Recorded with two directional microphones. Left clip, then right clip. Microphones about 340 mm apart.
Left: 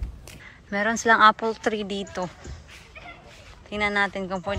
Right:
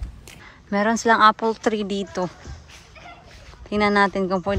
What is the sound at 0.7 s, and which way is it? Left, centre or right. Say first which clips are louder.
Speech: right 2 dB; centre.